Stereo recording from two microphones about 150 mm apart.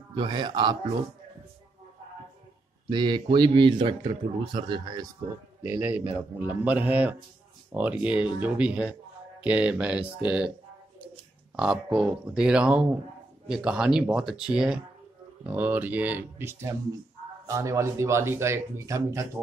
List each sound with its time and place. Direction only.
0.1 s a man's voice: 30° right (ahead or behind)
2.9 s a man's voice: 30° right (ahead or behind)
5.6 s speech: 10° right (ahead or behind)
11.5 s speech: 5° right (ahead or behind); by 19.2 s 20° right (ahead or behind)